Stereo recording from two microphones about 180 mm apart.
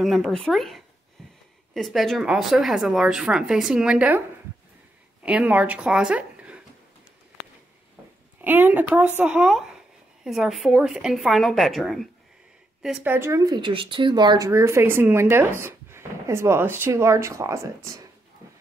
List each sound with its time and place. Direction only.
0.0 s speech: centre (ahead or behind)
5.2 s speech: 10° right (ahead or behind)
8.4 s speech: 10° right (ahead or behind)